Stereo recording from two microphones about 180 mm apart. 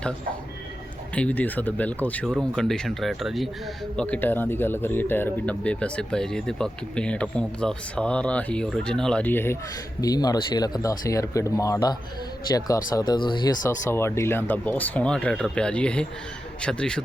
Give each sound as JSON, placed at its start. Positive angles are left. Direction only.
{"t": 1.1, "sound": "speech", "side_deg": 10}